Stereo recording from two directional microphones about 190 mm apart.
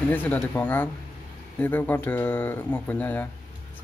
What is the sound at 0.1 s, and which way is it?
Speech, 10° left (ahead or behind).